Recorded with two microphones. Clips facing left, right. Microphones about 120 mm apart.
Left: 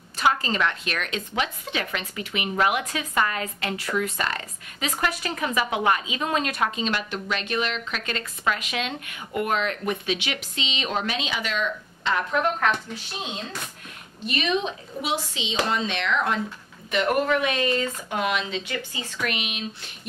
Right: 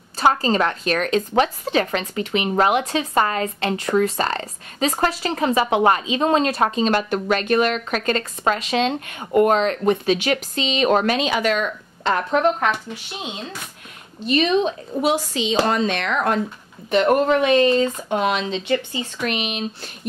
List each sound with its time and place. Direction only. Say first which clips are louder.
0.2 s a woman's voice: right 5 dB; 35° right (ahead or behind)
12.3 s speech: right 5 dB; 25° right (ahead or behind)
13.2 s speech: right 1 dB; 10° right (ahead or behind)
14.6 s a woman's voice: right 9 dB; 45° right (ahead or behind)
16.9 s a woman's voice: right 6 dB; 30° right (ahead or behind)